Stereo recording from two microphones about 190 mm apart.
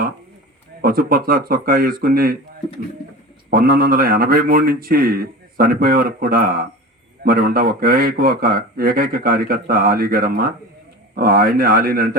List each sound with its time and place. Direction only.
0.8 s a man's voice: 50° right (ahead or behind)
3.5 s a man's voice: 50° right (ahead or behind)